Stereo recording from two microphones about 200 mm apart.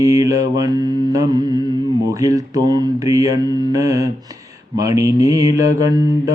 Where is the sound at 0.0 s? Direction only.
15° right (ahead or behind).